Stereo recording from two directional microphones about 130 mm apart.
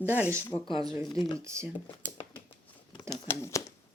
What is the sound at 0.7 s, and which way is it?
Speech, 30° right (ahead or behind).